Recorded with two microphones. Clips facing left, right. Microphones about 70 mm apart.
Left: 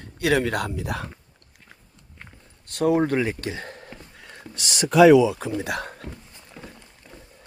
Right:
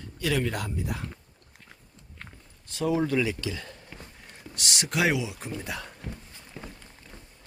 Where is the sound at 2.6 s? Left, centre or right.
Left.